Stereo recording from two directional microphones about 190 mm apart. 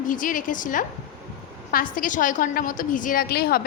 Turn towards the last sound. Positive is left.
turn(degrees=55)  # may be behind; listen again after turning